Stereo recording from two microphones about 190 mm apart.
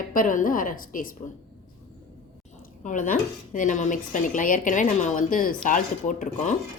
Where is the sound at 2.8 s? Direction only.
40° left (ahead or behind).